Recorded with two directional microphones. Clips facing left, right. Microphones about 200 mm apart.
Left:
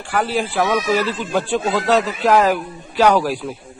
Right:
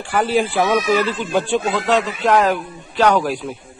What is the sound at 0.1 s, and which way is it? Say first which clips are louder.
Speech: right 3 dB; centre (ahead or behind).